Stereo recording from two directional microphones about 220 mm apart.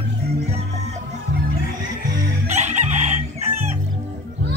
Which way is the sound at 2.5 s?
30° right (ahead or behind).